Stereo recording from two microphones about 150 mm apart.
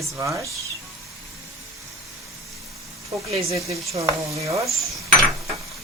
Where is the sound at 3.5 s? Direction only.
20° right (ahead or behind).